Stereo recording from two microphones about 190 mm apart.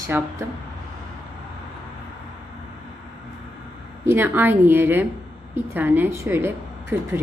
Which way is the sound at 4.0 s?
10° right (ahead or behind).